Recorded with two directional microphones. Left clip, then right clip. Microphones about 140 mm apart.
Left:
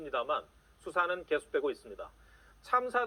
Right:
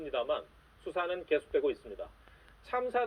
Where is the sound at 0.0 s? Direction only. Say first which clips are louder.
Even; centre (ahead or behind).